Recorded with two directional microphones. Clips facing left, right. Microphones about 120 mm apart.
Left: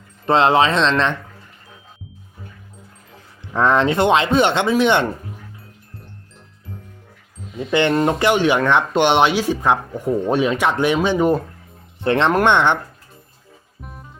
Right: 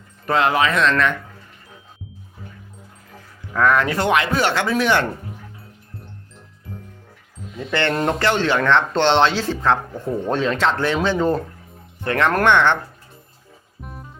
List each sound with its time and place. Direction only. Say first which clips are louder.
0.3 s speech: left 4 dB; 25° left (ahead or behind)
3.5 s speech: left 2 dB; 25° left (ahead or behind)
7.7 s speech: left 4 dB; 15° left (ahead or behind)
13.8 s music: right 2 dB; centre (ahead or behind)